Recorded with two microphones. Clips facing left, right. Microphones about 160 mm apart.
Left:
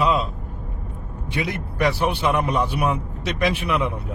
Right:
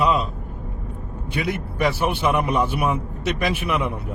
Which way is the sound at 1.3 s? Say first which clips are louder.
Right 1 dB; centre (ahead or behind).